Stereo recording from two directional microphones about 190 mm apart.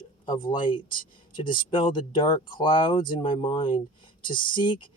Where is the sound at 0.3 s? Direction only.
25° left (ahead or behind).